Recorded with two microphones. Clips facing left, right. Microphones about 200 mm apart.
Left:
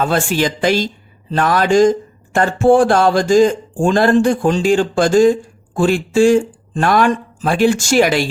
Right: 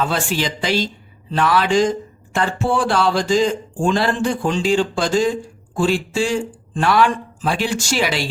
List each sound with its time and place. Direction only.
0.0 s speech: 50° left (ahead or behind)